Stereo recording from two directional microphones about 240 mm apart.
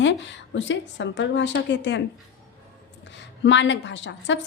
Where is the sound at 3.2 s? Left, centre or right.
Left.